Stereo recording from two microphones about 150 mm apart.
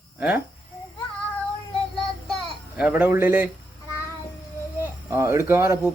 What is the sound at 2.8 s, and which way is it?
Speech, 10° right (ahead or behind).